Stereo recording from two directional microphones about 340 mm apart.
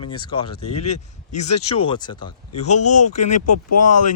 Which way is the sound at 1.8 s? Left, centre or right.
Centre.